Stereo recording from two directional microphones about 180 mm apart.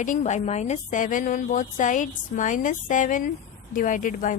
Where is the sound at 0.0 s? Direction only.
40° left (ahead or behind).